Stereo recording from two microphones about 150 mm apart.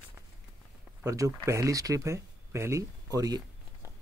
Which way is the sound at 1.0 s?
20° right (ahead or behind).